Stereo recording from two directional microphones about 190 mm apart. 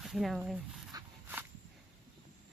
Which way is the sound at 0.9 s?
10° right (ahead or behind).